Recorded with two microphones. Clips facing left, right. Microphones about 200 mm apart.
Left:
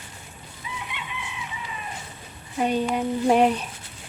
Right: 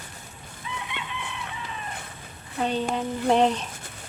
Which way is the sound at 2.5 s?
10° left (ahead or behind).